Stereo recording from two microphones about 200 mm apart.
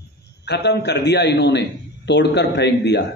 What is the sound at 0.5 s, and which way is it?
A man's voice, 55° left (ahead or behind).